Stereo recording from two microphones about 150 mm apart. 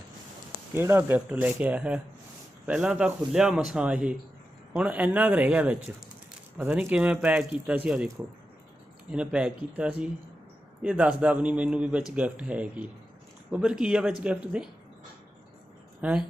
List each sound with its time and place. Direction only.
0.7 s a man's voice: 15° right (ahead or behind)
9.1 s a man's voice: 5° right (ahead or behind)
16.0 s speech: 10° right (ahead or behind)